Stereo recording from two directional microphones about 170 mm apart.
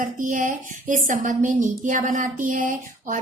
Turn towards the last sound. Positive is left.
turn(degrees=-50)  # may be behind; listen again after turning